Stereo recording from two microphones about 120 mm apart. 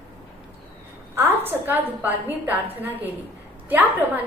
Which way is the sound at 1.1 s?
15° right (ahead or behind).